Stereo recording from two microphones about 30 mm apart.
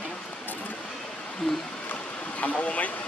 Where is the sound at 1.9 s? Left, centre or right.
Left.